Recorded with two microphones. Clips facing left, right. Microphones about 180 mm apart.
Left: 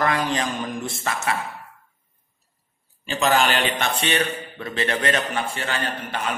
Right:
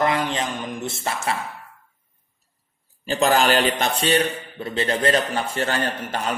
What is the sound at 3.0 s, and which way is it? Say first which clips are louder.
A man's voice: right 2 dB; 40° right (ahead or behind).